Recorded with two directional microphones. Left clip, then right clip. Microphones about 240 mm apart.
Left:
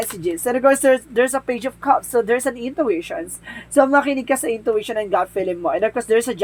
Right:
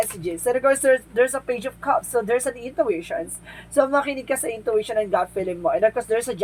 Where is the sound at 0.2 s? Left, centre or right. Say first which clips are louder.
Left 8 dB; left.